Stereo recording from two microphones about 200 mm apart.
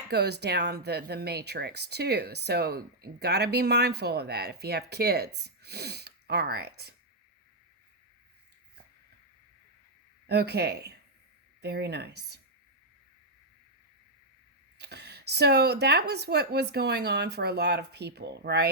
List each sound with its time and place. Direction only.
0.1 s speech: 55° right (ahead or behind)
10.2 s speech: 55° right (ahead or behind)
14.8 s speech: 55° right (ahead or behind)